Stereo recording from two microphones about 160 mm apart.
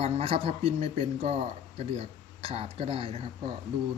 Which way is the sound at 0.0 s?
40° right (ahead or behind).